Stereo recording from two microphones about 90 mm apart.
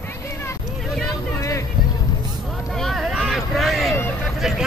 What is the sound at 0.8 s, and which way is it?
Vehicle, 5° left (ahead or behind).